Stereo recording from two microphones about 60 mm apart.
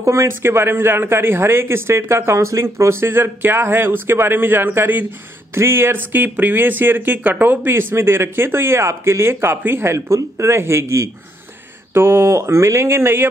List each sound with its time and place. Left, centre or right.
0.0 s speech: right
12.4 s speech: right